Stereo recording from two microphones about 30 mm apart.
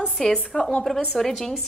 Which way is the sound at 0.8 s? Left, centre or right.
Centre.